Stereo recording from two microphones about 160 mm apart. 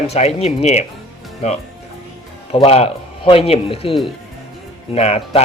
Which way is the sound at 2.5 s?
40° left (ahead or behind).